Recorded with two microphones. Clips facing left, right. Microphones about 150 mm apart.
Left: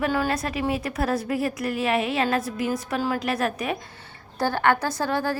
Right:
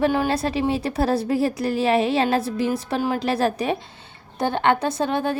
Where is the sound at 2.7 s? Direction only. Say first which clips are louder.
Right 3 dB; 20° right (ahead or behind).